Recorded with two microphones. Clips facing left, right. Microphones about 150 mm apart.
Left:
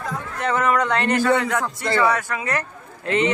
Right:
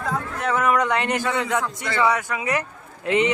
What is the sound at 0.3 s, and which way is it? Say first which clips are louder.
Speech: left 1 dB; 5° right (ahead or behind).